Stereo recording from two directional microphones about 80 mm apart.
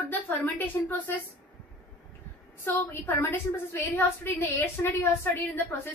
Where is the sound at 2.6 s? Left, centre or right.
Left.